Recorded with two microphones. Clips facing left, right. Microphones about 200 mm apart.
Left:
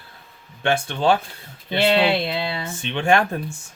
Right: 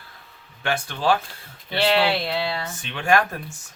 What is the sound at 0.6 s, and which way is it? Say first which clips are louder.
Speech: left 3 dB; 25° left (ahead or behind).